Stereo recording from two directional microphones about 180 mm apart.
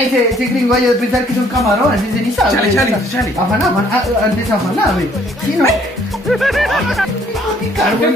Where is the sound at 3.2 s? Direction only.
Centre (ahead or behind).